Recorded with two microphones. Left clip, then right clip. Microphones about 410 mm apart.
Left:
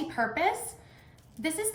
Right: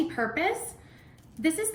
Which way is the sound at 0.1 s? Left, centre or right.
Centre.